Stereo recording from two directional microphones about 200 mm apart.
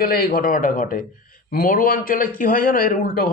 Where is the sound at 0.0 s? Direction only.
50° left (ahead or behind).